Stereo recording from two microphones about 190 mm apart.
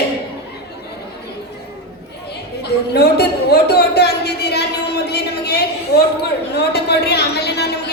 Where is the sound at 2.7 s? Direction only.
60° left (ahead or behind).